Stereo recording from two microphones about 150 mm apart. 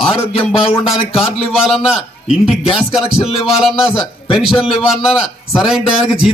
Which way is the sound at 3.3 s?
40° left (ahead or behind).